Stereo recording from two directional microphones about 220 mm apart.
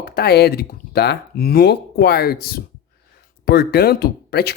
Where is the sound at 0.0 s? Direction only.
45° left (ahead or behind).